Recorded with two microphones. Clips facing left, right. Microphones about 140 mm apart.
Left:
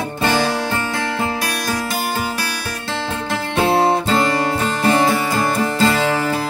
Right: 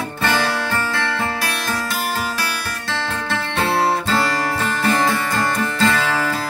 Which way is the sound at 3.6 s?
15° left (ahead or behind).